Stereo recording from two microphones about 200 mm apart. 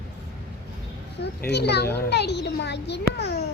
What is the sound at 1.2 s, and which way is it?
A child's voice, 55° left (ahead or behind).